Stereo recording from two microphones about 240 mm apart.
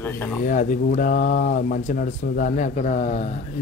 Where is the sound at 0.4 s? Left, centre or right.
Left.